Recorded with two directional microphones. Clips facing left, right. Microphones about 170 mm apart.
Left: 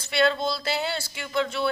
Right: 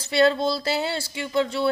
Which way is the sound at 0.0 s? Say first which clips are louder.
Right 4 dB; 35° right (ahead or behind).